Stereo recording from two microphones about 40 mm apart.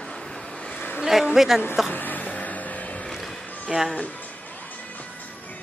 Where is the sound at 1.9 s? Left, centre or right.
Left.